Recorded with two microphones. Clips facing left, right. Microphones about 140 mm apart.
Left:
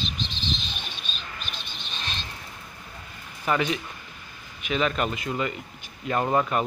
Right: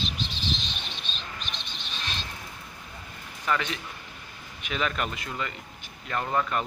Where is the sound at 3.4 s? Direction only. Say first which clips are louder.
Left 4 dB; 15° left (ahead or behind).